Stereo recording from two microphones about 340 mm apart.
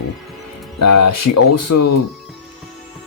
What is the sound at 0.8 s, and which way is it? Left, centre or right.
Speech, left.